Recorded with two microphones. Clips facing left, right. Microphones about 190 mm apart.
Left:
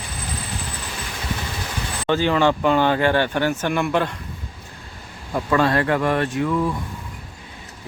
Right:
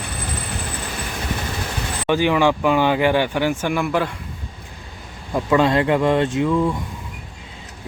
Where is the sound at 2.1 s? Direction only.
15° right (ahead or behind).